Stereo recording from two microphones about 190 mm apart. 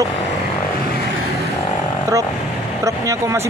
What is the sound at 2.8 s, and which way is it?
Speech, 15° right (ahead or behind).